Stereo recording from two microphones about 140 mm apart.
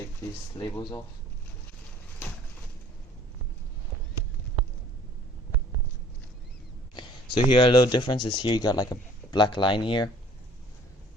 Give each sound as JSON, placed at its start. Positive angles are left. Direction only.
{"t": 0.5, "sound": "speech", "side_deg": 30}
{"t": 6.9, "sound": "speech", "side_deg": 35}